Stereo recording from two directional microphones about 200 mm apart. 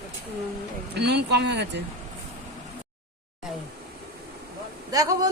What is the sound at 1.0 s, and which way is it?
Speech, 55° right (ahead or behind).